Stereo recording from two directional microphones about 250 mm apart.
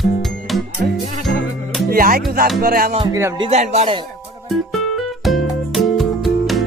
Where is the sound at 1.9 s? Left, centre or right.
Right.